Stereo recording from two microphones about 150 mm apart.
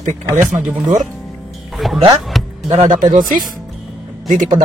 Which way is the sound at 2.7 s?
55° right (ahead or behind).